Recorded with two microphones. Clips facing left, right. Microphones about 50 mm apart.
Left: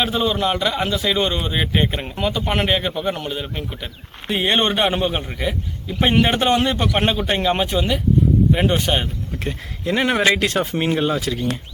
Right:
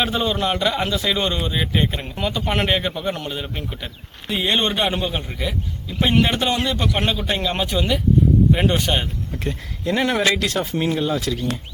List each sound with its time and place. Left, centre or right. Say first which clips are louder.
0.0 s speech: left 1 dB; centre
2.1 s speech: left 1 dB; centre
4.3 s a man's voice: left 2 dB; left
8.5 s a man's voice: left 1 dB; centre; by 11.1 s left